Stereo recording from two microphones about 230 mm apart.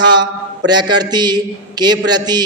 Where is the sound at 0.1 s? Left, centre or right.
Centre.